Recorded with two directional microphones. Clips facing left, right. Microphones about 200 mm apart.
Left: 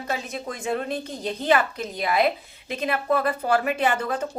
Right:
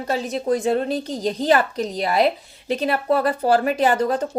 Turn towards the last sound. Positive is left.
turn(degrees=-35)  # may be behind; listen again after turning